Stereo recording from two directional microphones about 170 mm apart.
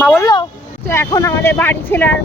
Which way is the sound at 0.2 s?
25° left (ahead or behind).